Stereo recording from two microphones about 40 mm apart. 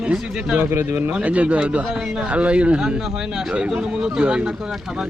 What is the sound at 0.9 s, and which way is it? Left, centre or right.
Speech, right.